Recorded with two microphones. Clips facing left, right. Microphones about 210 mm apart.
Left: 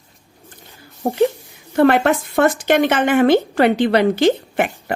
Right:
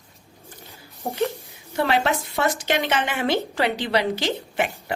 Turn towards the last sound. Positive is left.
turn(degrees=55)  # may be behind; listen again after turning